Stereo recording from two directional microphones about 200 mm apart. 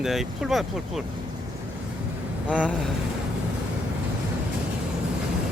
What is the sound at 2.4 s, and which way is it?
Speech, 5° left (ahead or behind).